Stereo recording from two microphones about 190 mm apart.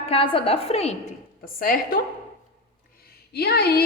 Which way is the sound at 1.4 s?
50° left (ahead or behind).